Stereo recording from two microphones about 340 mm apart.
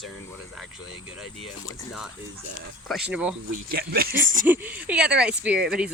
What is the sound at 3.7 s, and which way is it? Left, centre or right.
Speech, right.